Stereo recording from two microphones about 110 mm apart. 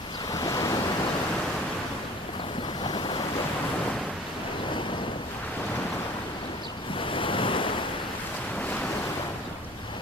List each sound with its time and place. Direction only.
0.3 s waves: 30° left (ahead or behind)
2.8 s waves: 45° left (ahead or behind)
7.0 s waves: 50° left (ahead or behind)